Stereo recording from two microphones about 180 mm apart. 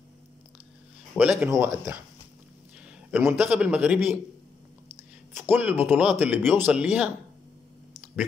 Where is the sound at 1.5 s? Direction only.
15° right (ahead or behind).